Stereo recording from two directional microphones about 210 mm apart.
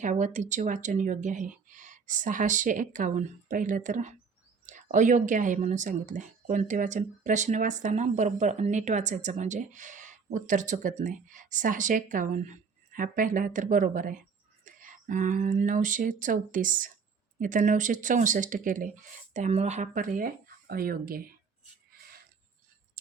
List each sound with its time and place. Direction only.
0.0 s speech: 35° right (ahead or behind)